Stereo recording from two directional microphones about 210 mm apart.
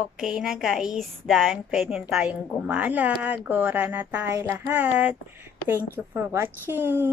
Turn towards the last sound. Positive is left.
turn(degrees=-10)  # may be behind; listen again after turning